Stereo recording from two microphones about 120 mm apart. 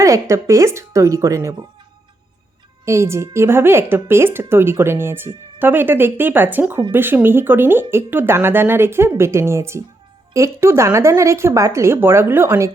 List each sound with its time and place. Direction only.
0.0 s a woman's voice: 25° right (ahead or behind)
2.8 s a woman's voice: 25° right (ahead or behind)